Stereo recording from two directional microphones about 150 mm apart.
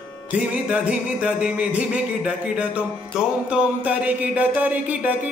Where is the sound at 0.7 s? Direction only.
10° right (ahead or behind).